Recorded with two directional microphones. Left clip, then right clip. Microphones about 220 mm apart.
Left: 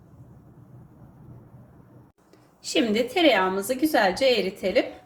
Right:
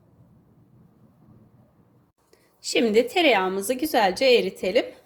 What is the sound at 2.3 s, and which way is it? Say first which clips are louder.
A woman's voice: right 1 dB; 35° right (ahead or behind).